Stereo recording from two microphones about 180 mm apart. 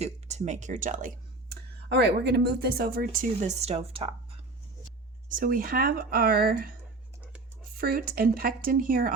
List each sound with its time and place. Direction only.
0.0 s speech: 40° right (ahead or behind)
1.9 s speech: 70° right (ahead or behind); by 4.4 s 30° right (ahead or behind)
5.3 s speech: 50° right (ahead or behind)
7.8 s speech: 55° right (ahead or behind)